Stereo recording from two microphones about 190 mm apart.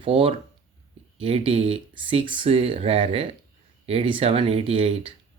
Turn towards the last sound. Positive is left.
turn(degrees=-30)  # may be behind; listen again after turning